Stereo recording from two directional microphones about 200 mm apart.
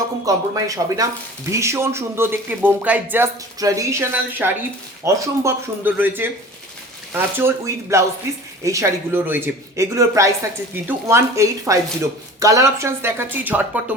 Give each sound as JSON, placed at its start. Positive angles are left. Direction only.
{"t": 0.3, "sound": "speech", "side_deg": -15}